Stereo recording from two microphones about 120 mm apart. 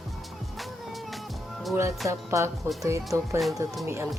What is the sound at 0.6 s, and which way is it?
Music, centre (ahead or behind).